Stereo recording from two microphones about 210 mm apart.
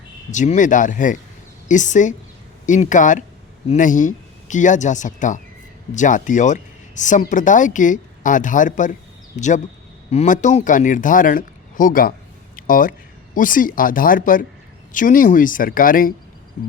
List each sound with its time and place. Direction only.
0.3 s a man's voice: 35° left (ahead or behind)
12.5 s a sound: 40° left (ahead or behind)
13.3 s a man's voice: 40° left (ahead or behind)